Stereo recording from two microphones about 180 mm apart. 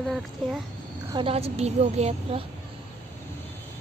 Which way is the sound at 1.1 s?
30° right (ahead or behind).